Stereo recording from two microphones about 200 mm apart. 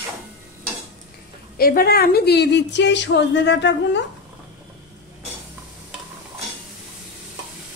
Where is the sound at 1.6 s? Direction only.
50° left (ahead or behind).